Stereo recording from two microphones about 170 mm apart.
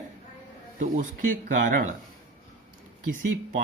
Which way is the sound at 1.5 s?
50° right (ahead or behind).